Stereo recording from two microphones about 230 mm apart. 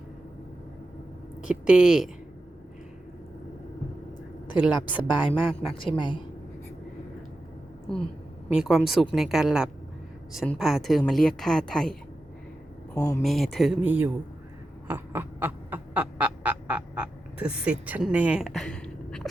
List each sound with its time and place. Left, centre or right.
1.4 s a woman's voice: centre
4.5 s a woman's voice: centre
5.7 s a woman's voice: left
8.5 s a woman's voice: centre
13.2 s a woman's voice: centre
14.8 s a sound: centre
17.4 s a woman's voice: centre